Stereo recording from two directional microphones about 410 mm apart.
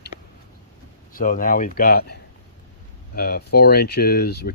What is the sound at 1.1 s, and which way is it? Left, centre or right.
Speech, centre.